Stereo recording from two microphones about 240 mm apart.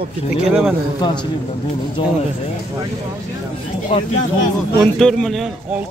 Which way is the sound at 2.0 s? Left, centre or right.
Left.